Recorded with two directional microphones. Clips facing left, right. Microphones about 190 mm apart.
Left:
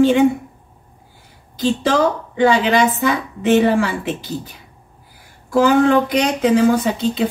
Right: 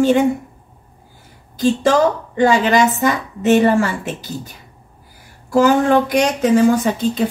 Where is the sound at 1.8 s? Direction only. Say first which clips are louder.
Right 2 dB; 45° right (ahead or behind).